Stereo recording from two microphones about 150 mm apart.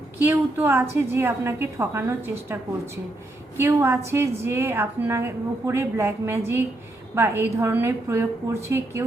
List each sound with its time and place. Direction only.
0.2 s a woman's voice: 15° right (ahead or behind)